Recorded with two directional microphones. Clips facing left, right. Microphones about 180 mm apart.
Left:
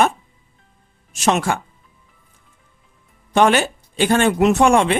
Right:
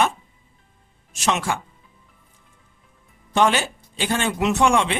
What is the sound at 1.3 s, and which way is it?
Speech, 50° left (ahead or behind).